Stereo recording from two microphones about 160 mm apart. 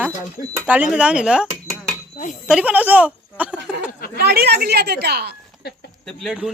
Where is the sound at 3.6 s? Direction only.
90° right.